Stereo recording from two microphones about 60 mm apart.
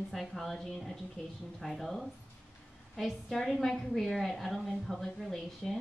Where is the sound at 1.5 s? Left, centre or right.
Centre.